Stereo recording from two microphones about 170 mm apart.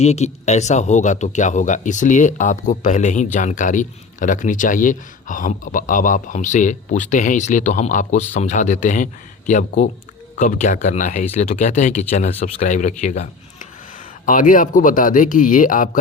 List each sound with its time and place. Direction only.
0.0 s a man's voice: 40° left (ahead or behind)
14.3 s a man's voice: 50° left (ahead or behind)